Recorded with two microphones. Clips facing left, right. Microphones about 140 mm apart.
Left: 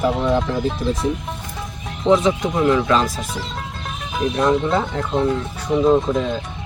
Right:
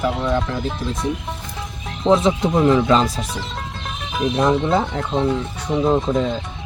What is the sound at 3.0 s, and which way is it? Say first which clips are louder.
Speech: right 1 dB; 5° left (ahead or behind).